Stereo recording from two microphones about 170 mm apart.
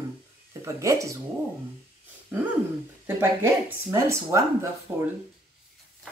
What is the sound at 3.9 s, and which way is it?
Speech, 15° right (ahead or behind).